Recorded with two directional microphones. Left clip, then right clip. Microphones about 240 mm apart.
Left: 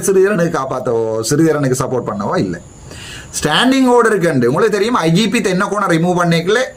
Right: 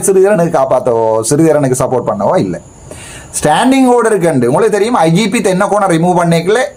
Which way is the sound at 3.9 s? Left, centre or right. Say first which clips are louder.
Right 2 dB; centre.